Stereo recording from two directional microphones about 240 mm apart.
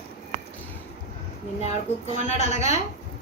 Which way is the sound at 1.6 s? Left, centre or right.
Left.